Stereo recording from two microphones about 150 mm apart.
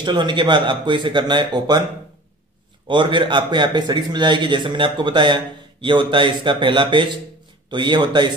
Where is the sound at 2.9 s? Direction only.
35° right (ahead or behind).